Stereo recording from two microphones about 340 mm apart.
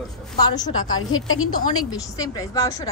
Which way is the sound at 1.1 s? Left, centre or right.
Left.